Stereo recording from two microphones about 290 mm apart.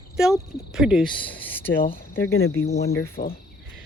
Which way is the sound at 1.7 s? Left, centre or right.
Left.